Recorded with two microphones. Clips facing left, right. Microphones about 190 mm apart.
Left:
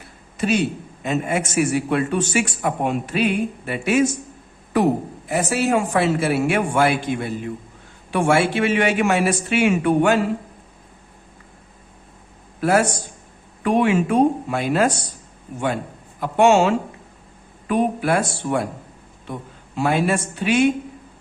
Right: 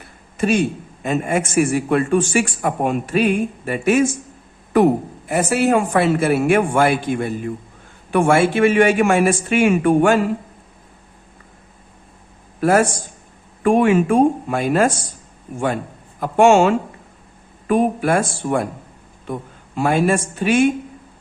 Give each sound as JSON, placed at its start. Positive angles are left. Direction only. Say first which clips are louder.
{"t": 0.3, "sound": "a man's voice", "louder": "right 3 dB", "side_deg": -50}
{"t": 5.3, "sound": "a man's voice", "louder": "right 3 dB", "side_deg": -55}
{"t": 12.5, "sound": "a man's voice", "louder": "right 3 dB", "side_deg": -50}
{"t": 16.2, "sound": "a man's voice", "louder": "right 3 dB", "side_deg": -50}